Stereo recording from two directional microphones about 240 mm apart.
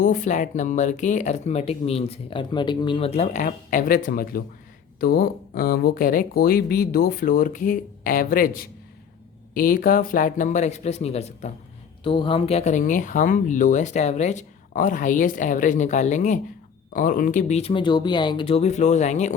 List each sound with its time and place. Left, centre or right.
0.0 s speech: left
9.6 s speech: left